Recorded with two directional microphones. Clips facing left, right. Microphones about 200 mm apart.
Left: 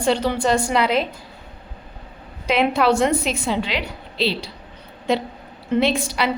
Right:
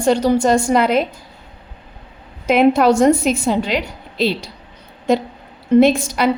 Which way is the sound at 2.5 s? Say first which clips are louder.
Right 6 dB; 45° right (ahead or behind).